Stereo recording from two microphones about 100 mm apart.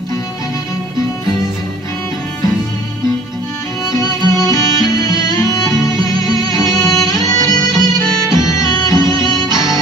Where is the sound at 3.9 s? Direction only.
40° left (ahead or behind).